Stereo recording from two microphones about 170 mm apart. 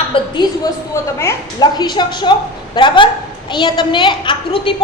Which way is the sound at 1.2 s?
20° left (ahead or behind).